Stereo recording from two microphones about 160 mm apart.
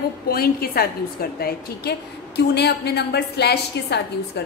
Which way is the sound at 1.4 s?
85° left.